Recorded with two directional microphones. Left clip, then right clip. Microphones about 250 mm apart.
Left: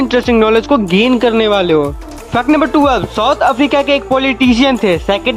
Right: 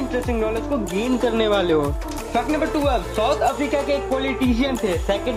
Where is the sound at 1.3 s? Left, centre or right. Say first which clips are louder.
Left 8 dB; left.